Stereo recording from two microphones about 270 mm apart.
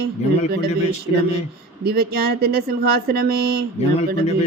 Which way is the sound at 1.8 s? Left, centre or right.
Right.